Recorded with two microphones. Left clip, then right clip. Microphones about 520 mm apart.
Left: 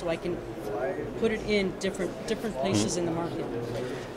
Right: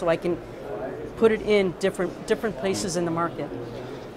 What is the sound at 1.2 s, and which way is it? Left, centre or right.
Speech, right.